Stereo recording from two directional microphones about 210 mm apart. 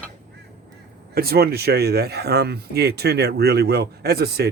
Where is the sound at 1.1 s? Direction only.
45° right (ahead or behind).